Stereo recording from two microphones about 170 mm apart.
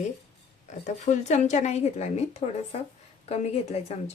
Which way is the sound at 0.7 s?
45° left (ahead or behind).